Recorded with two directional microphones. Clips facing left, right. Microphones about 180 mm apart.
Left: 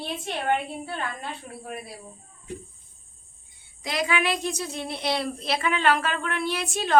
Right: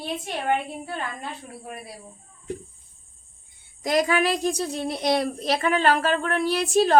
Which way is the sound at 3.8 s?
45° right (ahead or behind).